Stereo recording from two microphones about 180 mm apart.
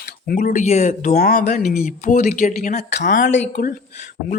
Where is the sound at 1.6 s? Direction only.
45° left (ahead or behind).